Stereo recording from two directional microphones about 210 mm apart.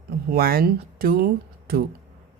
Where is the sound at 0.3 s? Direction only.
45° right (ahead or behind).